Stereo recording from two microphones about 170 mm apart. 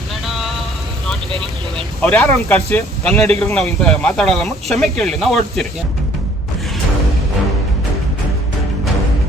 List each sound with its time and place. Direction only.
0.3 s vehicle: centre (ahead or behind)
2.0 s speech: 10° left (ahead or behind)
3.5 s speech: centre (ahead or behind)